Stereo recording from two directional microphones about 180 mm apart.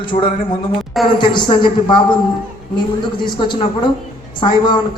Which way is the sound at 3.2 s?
25° left (ahead or behind).